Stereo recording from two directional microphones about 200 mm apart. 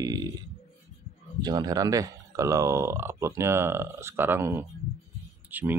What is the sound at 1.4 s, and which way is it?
Speech, 20° right (ahead or behind).